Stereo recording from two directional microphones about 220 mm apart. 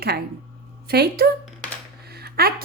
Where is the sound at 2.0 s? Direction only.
45° right (ahead or behind).